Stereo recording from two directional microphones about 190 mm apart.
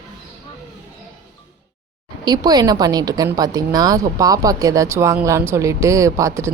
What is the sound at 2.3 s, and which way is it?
A woman's voice, 20° right (ahead or behind).